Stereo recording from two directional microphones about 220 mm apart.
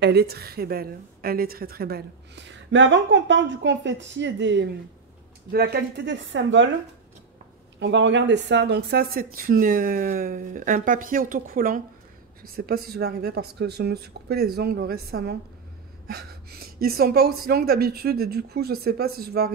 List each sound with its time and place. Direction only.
0.0 s a woman's voice: 45° right (ahead or behind)
7.8 s a woman's voice: 55° right (ahead or behind)